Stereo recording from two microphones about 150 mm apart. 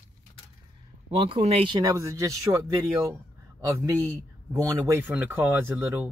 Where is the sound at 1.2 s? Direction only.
40° right (ahead or behind).